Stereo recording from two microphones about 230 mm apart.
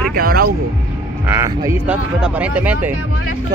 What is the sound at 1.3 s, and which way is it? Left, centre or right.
Speech, centre.